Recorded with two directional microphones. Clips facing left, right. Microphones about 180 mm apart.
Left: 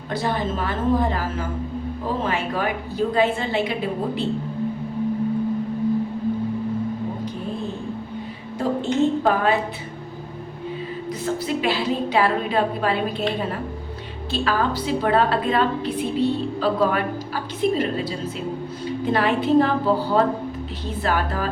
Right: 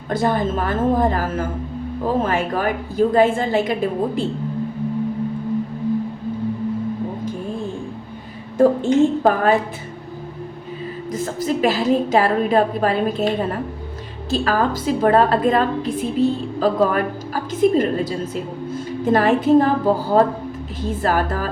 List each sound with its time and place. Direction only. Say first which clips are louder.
0.1 s a woman's voice: right 5 dB; 50° right (ahead or behind)
8.5 s a woman's voice: right 7 dB; 50° right (ahead or behind)
11.1 s a woman's voice: right 3 dB; 45° right (ahead or behind)